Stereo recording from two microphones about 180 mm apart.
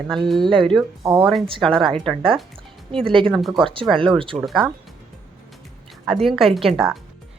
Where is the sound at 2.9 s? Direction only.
30° right (ahead or behind).